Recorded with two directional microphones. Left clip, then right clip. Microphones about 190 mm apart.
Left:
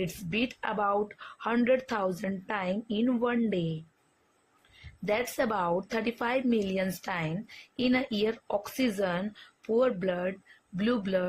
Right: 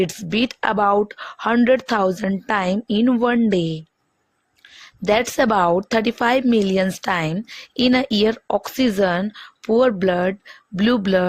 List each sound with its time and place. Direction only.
0.3 s speech: 55° right (ahead or behind)
5.0 s speech: 50° right (ahead or behind)